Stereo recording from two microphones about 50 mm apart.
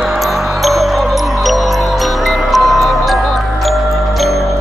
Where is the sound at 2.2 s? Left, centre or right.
Centre.